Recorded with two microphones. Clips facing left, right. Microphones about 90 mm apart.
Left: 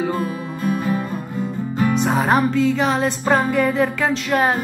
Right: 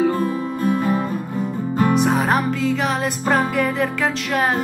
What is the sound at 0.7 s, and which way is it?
Music, 45° right (ahead or behind).